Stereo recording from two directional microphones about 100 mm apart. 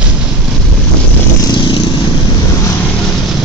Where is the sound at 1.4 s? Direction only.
50° left (ahead or behind).